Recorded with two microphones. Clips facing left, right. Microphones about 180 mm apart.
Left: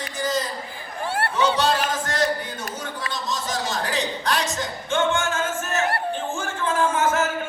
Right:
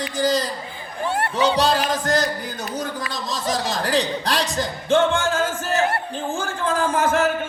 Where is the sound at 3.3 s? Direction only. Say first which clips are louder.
Right 3 dB; 35° right (ahead or behind).